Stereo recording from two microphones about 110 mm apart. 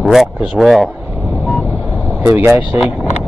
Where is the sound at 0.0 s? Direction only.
Centre (ahead or behind).